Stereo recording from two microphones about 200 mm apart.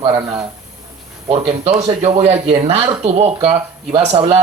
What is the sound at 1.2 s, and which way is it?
Speech, 30° right (ahead or behind).